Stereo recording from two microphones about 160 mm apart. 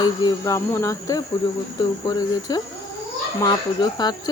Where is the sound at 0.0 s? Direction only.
25° left (ahead or behind).